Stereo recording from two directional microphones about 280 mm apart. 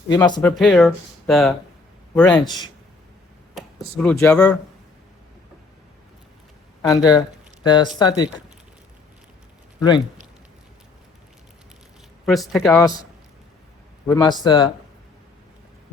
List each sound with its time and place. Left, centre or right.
0.1 s speech: centre
0.5 s speech: centre
2.2 s speech: centre
3.5 s speech: centre
6.8 s speech: centre
12.2 s speech: centre
14.1 s speech: centre